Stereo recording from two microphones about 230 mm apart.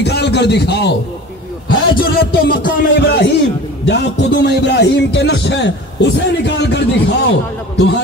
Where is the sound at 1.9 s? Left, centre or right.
Left.